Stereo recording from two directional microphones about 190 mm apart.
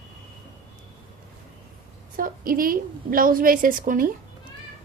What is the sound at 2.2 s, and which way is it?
A woman's voice, 50° right (ahead or behind).